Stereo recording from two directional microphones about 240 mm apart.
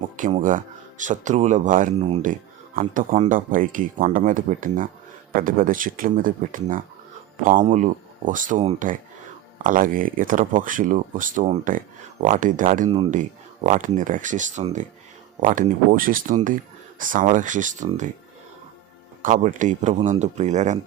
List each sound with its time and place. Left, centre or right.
0.2 s speech: right
19.2 s speech: right